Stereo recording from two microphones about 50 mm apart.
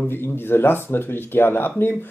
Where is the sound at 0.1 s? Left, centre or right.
Left.